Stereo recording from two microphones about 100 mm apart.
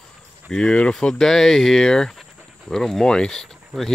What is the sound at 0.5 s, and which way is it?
Speech, 10° left (ahead or behind).